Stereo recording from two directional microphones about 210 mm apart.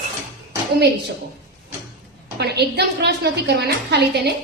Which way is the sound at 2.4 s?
50° right (ahead or behind).